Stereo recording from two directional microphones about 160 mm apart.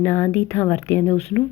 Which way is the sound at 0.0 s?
15° left (ahead or behind).